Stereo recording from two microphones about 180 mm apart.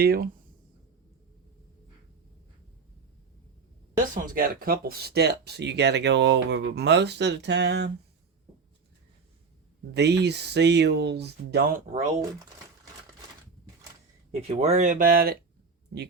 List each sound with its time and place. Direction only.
0.0 s speech: 60° right (ahead or behind)
3.9 s speech: 45° right (ahead or behind); by 7.9 s 70° right (ahead or behind)
9.9 s speech: 70° right (ahead or behind)
14.4 s speech: 40° right (ahead or behind); by 15.4 s 55° right (ahead or behind)